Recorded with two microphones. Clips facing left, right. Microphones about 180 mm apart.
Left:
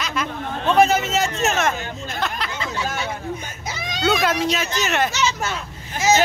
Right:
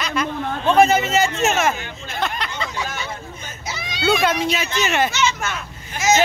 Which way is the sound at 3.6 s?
45° left (ahead or behind).